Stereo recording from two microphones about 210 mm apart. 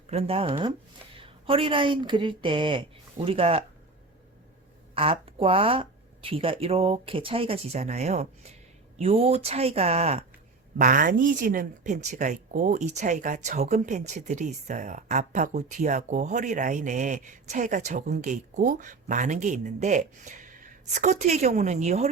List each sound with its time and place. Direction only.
0.1 s speech: 30° right (ahead or behind)
4.9 s speech: 25° right (ahead or behind)
10.8 s speech: 40° right (ahead or behind)